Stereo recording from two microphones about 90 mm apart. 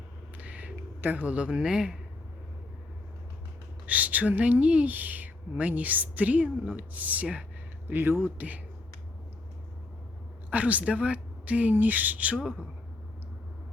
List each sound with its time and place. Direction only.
0.3 s a sound: 15° right (ahead or behind)
3.8 s speech: 15° right (ahead or behind)
10.5 s speech: 15° right (ahead or behind)